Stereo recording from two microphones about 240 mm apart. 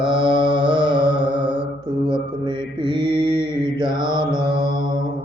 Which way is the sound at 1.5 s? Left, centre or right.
Centre.